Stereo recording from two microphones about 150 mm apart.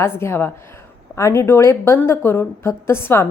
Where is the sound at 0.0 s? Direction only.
15° left (ahead or behind).